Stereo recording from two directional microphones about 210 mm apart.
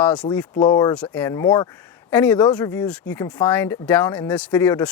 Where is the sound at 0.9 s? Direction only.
5° left (ahead or behind).